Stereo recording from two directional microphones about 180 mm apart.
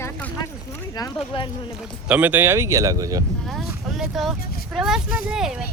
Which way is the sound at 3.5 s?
Centre (ahead or behind).